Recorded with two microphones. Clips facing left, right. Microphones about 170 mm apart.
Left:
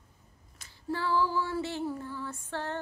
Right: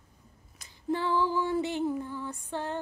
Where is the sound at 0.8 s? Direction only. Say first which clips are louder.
Right 1 dB; 20° right (ahead or behind).